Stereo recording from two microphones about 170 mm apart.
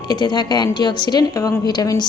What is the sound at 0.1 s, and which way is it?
A woman's voice, 25° left (ahead or behind).